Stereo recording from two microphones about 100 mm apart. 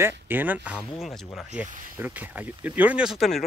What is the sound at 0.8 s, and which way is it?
Speech, centre (ahead or behind).